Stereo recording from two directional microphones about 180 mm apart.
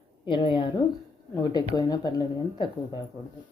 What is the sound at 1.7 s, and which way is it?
Speech, 20° left (ahead or behind).